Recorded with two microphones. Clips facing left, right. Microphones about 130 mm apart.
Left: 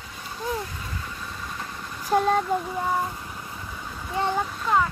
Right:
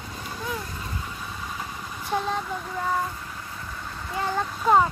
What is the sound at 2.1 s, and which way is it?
Speech, 50° left (ahead or behind).